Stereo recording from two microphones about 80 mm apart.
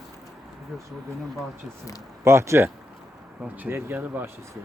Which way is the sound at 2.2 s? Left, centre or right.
Right.